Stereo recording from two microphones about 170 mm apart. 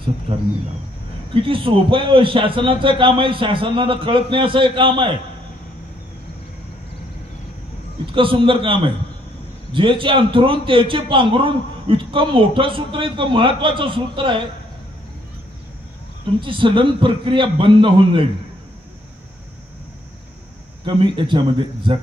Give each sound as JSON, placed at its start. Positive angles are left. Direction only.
{"t": 0.3, "sound": "a man's voice", "side_deg": -35}
{"t": 8.1, "sound": "a man's voice", "side_deg": -30}
{"t": 16.3, "sound": "a man's voice", "side_deg": -30}
{"t": 20.8, "sound": "a man's voice", "side_deg": -30}